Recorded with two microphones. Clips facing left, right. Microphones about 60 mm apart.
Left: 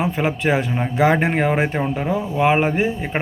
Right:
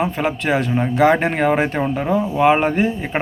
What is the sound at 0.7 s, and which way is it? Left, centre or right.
Speech, centre.